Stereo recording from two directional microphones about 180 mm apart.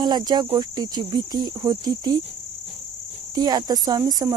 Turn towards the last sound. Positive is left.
turn(degrees=-20)  # may be behind; listen again after turning